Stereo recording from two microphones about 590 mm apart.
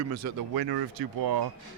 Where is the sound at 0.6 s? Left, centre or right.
Right.